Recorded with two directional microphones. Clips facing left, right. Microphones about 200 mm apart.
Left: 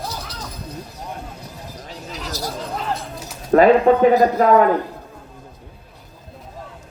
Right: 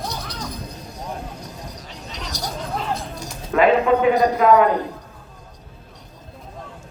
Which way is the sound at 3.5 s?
40° left (ahead or behind).